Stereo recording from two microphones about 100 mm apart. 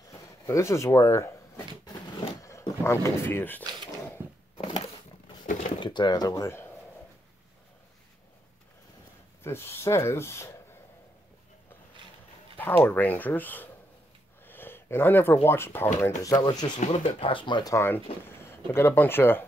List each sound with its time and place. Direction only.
0.1 s speech: 30° left (ahead or behind)
2.8 s speech: 25° left (ahead or behind)
3.6 s a sound: 45° right (ahead or behind)
4.6 s a sound: 55° left (ahead or behind)
5.8 s speech: 50° left (ahead or behind)
9.4 s speech: 25° left (ahead or behind)
12.5 s speech: 20° left (ahead or behind)
14.4 s a sound: 20° left (ahead or behind)
15.4 s speech: 25° left (ahead or behind)
16.2 s speech: 35° left (ahead or behind)
16.9 s speech: 80° left; by 17.6 s 55° left (ahead or behind)
17.6 s speech: 25° left (ahead or behind)
18.2 s a sound: 25° left (ahead or behind)
18.7 s speech: 25° left (ahead or behind)